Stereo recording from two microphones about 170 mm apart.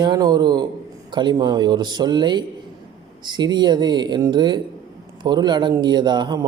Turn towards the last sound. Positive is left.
turn(degrees=-25)  # may be behind; listen again after turning